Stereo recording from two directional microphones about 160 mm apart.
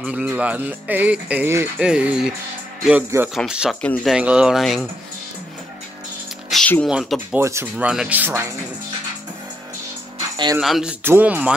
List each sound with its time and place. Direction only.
0.0 s speech: 5° right (ahead or behind)
3.8 s speech: 10° left (ahead or behind)
4.1 s speech: 5° right (ahead or behind)
6.5 s a sound: 5° left (ahead or behind)
6.9 s speech: 5° right (ahead or behind)
7.3 s speech: 15° right (ahead or behind)
10.3 s speech: 25° right (ahead or behind)
10.6 s speech: 5° right (ahead or behind)